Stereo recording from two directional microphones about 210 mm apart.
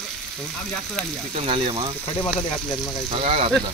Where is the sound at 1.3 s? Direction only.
25° right (ahead or behind).